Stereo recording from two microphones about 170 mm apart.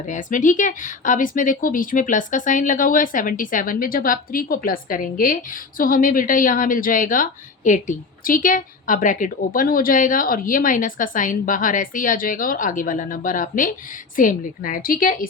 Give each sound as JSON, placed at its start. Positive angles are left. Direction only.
{"t": 0.0, "sound": "a woman's voice", "side_deg": 45}